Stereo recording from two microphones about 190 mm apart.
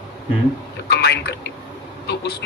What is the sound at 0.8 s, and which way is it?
Speech, 60° left (ahead or behind).